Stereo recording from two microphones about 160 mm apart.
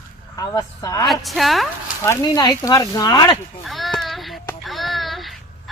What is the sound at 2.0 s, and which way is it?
Speech, 20° left (ahead or behind).